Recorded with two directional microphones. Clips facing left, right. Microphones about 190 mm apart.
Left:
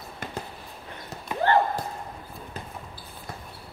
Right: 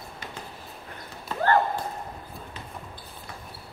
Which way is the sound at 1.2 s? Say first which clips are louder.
Left 1 dB; 20° left (ahead or behind).